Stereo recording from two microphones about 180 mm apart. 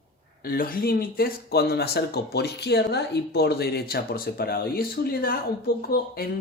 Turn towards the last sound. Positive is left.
turn(degrees=55)  # may be behind; listen again after turning